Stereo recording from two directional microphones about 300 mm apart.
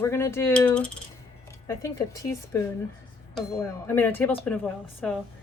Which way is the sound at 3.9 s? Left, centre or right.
Centre.